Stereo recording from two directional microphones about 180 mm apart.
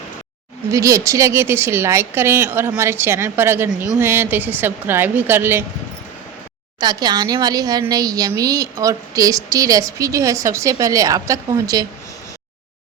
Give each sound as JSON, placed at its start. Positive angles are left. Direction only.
{"t": 0.7, "sound": "a woman's voice", "side_deg": -15}
{"t": 6.7, "sound": "a woman's voice", "side_deg": -25}